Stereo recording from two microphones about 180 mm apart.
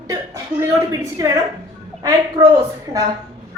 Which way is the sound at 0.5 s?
15° right (ahead or behind).